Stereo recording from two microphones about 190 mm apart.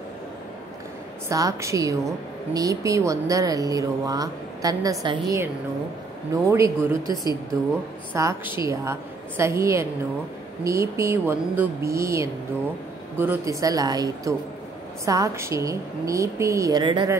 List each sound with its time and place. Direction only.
1.3 s a woman's voice: 15° right (ahead or behind)
8.1 s a woman's voice: 15° right (ahead or behind)